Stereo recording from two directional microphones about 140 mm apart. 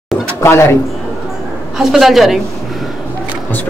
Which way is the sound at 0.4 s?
20° left (ahead or behind).